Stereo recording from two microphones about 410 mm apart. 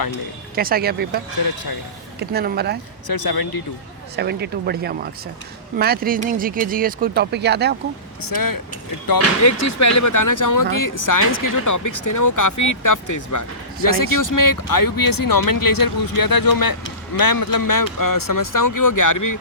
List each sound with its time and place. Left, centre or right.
0.5 s speech: right
2.3 s speech: right
3.1 s speech: left
4.2 s speech: right
8.2 s speech: left
9.1 s speech: left